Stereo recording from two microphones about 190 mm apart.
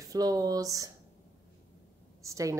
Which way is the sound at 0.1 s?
20° right (ahead or behind).